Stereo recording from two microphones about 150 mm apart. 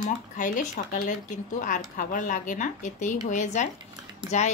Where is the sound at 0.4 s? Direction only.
60° left (ahead or behind).